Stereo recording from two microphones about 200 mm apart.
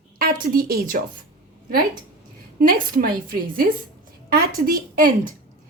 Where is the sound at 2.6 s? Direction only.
45° right (ahead or behind).